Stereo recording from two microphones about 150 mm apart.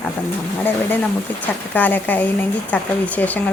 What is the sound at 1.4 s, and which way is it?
Speech, 10° left (ahead or behind).